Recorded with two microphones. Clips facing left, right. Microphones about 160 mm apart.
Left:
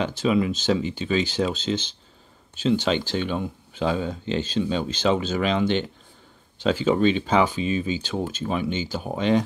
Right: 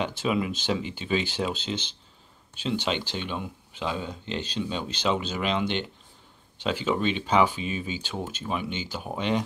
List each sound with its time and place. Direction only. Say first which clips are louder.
0.0 s speech: left 5 dB; 35° left (ahead or behind)